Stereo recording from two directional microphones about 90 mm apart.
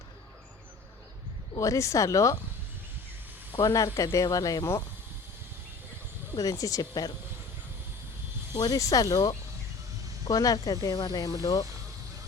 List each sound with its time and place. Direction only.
1.5 s speech: 35° left (ahead or behind)
3.6 s speech: 40° left (ahead or behind)
6.3 s speech: 40° left (ahead or behind)
8.5 s speech: 45° left (ahead or behind)